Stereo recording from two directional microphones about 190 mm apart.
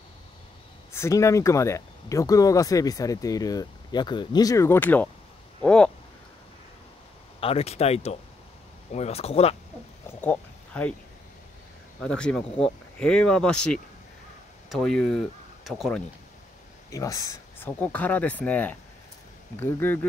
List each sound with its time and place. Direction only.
0.9 s speech: 15° left (ahead or behind)
7.3 s speech: 30° left (ahead or behind)
10.0 s speech: 10° left (ahead or behind)
12.0 s speech: 5° left (ahead or behind)
12.4 s speech: 30° left (ahead or behind)
13.0 s speech: 5° left (ahead or behind)
16.9 s speech: 15° left (ahead or behind)